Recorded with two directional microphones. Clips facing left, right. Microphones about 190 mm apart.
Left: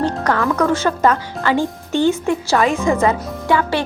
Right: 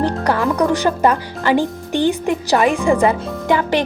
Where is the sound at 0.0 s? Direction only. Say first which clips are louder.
Right 1 dB; 15° right (ahead or behind).